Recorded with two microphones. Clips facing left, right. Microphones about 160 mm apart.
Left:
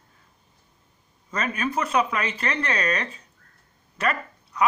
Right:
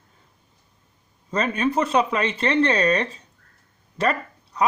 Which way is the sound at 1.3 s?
30° right (ahead or behind).